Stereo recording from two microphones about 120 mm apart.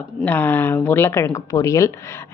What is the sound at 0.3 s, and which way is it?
A woman's voice, 15° left (ahead or behind).